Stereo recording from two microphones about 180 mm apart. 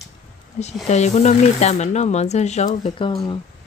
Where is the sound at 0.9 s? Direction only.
40° left (ahead or behind).